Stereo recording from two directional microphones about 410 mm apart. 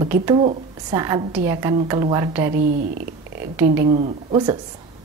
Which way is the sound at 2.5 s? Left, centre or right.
Right.